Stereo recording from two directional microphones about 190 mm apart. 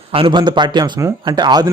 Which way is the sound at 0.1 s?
25° right (ahead or behind).